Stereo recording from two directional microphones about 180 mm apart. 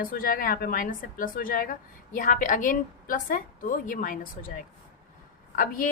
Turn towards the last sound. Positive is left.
turn(degrees=50)  # may be behind; listen again after turning